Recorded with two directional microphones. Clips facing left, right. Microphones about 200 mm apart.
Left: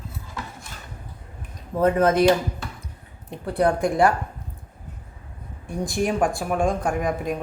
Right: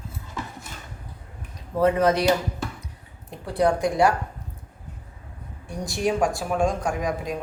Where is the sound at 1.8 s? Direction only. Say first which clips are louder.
Left 2 dB; 50° left (ahead or behind).